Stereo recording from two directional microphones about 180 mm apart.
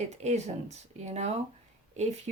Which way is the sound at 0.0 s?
40° right (ahead or behind).